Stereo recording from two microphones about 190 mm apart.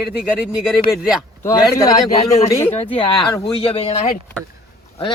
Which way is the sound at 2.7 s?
30° left (ahead or behind).